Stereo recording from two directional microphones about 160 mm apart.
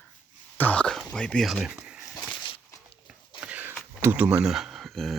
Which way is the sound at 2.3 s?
30° left (ahead or behind).